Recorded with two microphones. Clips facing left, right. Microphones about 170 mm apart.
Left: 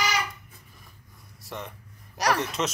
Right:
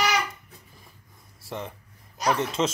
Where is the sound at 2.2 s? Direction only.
75° left (ahead or behind).